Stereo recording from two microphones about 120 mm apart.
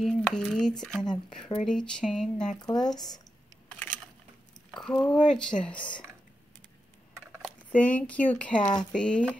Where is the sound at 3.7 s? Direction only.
15° left (ahead or behind).